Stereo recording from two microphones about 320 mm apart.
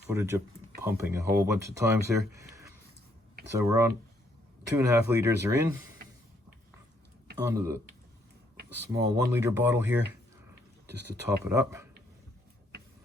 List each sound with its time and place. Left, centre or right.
0.1 s speech: centre
7.3 s speech: centre
8.9 s speech: centre
10.8 s speech: right
11.4 s speech: centre